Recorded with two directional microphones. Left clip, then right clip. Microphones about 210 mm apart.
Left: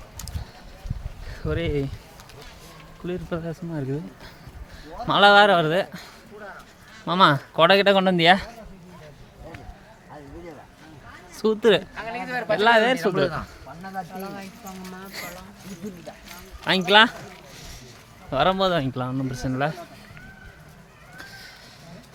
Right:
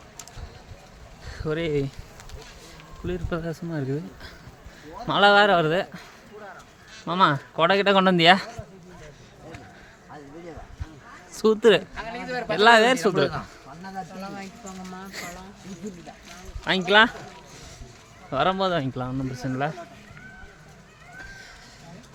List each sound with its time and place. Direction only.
1.4 s a man's voice: 5° right (ahead or behind)
3.1 s speech: 5° right (ahead or behind)
5.0 s a man's voice: 5° left (ahead or behind)
7.9 s speech: 15° right (ahead or behind)
11.3 s speech: 10° right (ahead or behind)
12.0 s a sound: 10° left (ahead or behind)
12.5 s speech: 15° right (ahead or behind)
16.6 s a man's voice: 5° left (ahead or behind)
18.3 s a man's voice: 5° left (ahead or behind)